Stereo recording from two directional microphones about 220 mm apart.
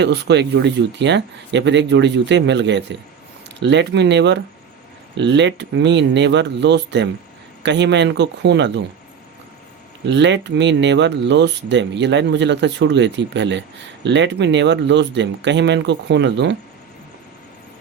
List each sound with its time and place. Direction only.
0.0 s speech: 50° right (ahead or behind)
10.1 s speech: 55° right (ahead or behind)